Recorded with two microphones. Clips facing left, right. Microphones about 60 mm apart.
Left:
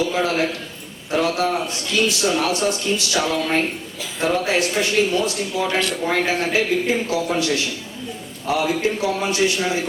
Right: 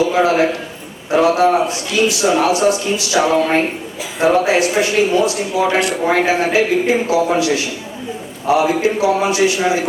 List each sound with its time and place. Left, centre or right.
0.1 s speech: right
1.6 s speech: centre